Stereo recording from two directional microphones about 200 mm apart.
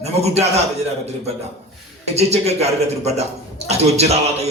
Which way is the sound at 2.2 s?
30° right (ahead or behind).